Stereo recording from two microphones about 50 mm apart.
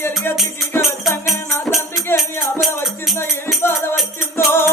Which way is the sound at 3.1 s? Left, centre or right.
Left.